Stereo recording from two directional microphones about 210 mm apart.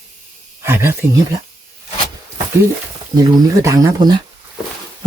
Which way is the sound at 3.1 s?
15° right (ahead or behind).